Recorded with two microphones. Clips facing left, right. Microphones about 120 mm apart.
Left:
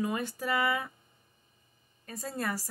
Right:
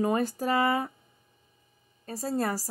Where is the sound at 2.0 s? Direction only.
35° right (ahead or behind).